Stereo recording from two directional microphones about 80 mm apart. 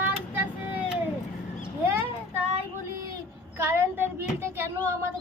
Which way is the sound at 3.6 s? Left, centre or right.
Right.